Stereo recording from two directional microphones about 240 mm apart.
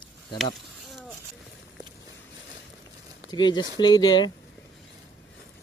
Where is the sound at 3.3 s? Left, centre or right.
Centre.